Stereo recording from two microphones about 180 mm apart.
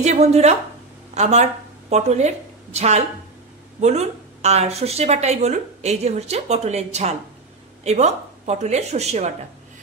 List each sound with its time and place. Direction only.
0.0 s a woman's voice: 40° right (ahead or behind)